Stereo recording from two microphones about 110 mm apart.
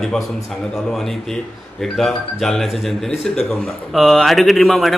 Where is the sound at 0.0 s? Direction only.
5° left (ahead or behind).